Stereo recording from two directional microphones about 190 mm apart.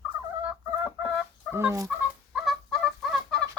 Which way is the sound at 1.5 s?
15° right (ahead or behind).